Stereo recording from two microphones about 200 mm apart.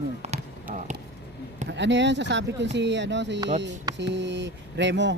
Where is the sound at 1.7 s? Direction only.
60° right (ahead or behind).